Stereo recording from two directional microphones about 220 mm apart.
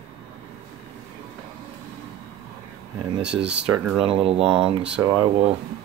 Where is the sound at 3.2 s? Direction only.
5° right (ahead or behind).